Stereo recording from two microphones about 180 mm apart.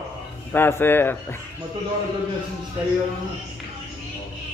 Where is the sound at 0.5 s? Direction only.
10° left (ahead or behind).